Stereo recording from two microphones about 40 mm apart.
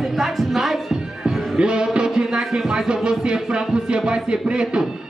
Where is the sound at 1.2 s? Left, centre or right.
Right.